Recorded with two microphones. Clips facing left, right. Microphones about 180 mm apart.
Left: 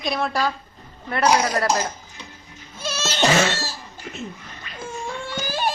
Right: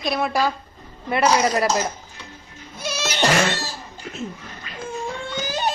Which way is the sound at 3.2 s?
Centre (ahead or behind).